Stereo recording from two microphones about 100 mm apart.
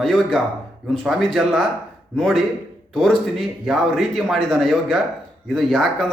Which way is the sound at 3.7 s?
Centre (ahead or behind).